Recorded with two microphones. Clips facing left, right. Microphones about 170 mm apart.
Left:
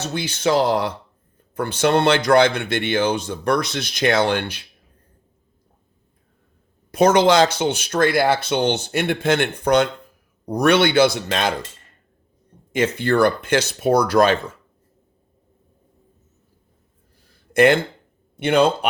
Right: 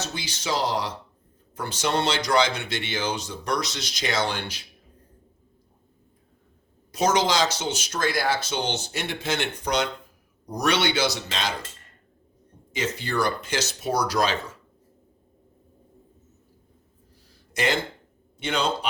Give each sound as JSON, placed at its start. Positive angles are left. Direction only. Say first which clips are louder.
{"t": 0.0, "sound": "speech", "louder": "left 10 dB", "side_deg": 60}
{"t": 6.9, "sound": "speech", "louder": "left 8 dB", "side_deg": 55}
{"t": 12.7, "sound": "speech", "louder": "left 9 dB", "side_deg": 55}
{"t": 17.5, "sound": "speech", "louder": "left 11 dB", "side_deg": 55}